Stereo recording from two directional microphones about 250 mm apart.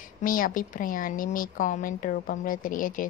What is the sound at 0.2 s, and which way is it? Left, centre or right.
A woman's voice, left.